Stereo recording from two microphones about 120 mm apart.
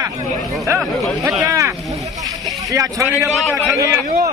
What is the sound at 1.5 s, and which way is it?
A man's voice, 25° right (ahead or behind).